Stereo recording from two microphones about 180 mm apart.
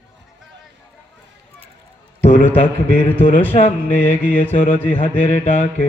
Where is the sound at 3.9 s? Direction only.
10° left (ahead or behind).